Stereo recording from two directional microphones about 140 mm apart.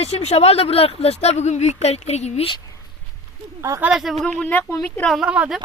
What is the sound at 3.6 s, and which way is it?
Speech, 20° right (ahead or behind).